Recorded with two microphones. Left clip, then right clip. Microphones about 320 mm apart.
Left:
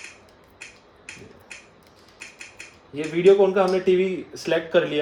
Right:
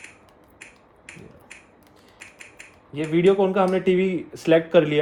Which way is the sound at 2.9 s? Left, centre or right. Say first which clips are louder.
Left 2 dB; right.